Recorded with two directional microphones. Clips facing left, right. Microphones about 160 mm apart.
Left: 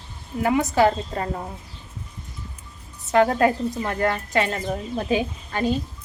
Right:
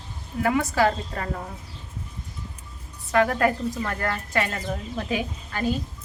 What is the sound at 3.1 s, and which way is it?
Speech, 25° left (ahead or behind).